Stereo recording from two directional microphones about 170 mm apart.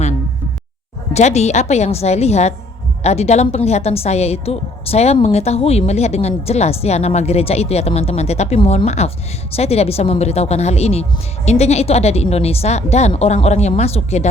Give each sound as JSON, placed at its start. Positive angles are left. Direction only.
{"t": 1.1, "sound": "a woman's voice", "side_deg": 40}